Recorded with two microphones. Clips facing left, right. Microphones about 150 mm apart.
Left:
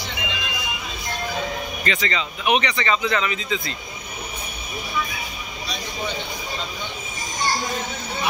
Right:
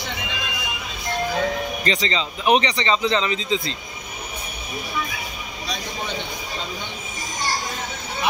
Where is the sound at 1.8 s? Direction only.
30° right (ahead or behind).